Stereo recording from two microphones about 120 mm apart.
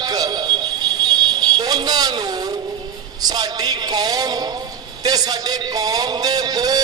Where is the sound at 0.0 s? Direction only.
35° right (ahead or behind).